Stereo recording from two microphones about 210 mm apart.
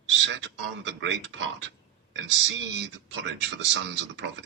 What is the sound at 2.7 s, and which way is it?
Speech, 55° right (ahead or behind).